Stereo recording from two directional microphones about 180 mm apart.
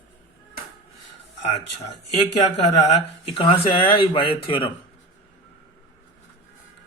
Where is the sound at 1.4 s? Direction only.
40° left (ahead or behind).